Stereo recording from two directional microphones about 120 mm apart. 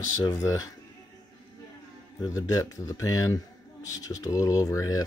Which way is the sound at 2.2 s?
30° left (ahead or behind).